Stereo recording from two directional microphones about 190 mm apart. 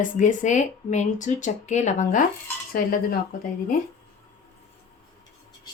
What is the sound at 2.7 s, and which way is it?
Cutlery, 50° left (ahead or behind).